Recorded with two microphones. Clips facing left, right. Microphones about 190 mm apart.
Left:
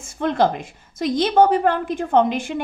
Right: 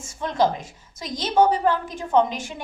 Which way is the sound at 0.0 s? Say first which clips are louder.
Left 3 dB; 60° left (ahead or behind).